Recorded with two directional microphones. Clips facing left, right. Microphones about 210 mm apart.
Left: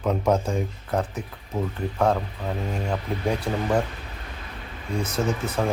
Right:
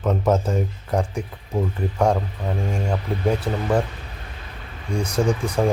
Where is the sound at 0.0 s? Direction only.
5° right (ahead or behind).